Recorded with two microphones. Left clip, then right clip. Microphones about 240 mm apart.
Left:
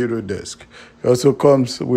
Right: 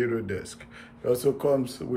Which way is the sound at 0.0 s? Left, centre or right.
Centre.